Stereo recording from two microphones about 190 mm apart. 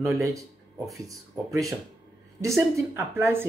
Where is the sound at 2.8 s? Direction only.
15° right (ahead or behind).